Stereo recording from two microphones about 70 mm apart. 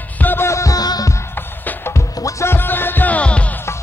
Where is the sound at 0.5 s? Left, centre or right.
Left.